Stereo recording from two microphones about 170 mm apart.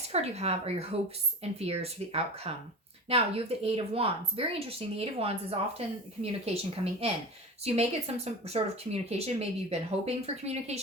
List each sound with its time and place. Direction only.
0.1 s speech: 40° right (ahead or behind)